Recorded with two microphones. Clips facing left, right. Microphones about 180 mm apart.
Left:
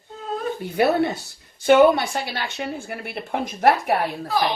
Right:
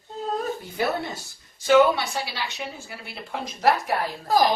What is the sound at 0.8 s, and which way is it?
A woman's voice, 65° left (ahead or behind).